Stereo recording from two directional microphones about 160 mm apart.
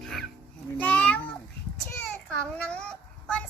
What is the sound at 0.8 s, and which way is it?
Child singing, 10° left (ahead or behind).